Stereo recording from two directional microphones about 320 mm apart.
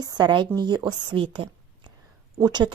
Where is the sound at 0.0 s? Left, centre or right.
Centre.